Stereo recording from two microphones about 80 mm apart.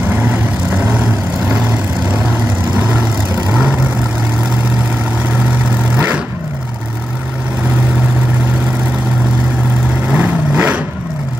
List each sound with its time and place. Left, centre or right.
0.1 s vehicle: right
2.7 s vehicle: centre
10.0 s vehicle: right